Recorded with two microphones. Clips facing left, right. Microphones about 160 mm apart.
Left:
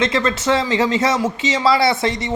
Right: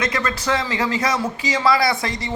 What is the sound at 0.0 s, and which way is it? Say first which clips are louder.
Speech: left 5 dB; 25° left (ahead or behind).